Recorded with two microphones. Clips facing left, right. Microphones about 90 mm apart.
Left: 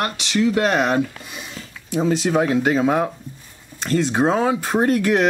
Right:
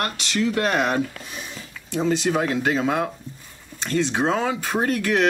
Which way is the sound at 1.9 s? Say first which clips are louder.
Left 2 dB; 5° left (ahead or behind).